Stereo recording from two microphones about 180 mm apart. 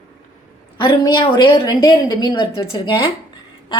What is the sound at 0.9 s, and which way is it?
A woman's voice, 25° left (ahead or behind).